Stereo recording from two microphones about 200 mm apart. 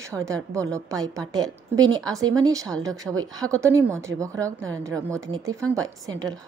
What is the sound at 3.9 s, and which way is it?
A woman's voice, 15° right (ahead or behind).